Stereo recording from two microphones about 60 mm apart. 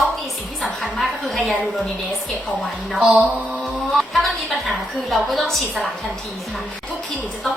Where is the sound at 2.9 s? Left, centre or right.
Right.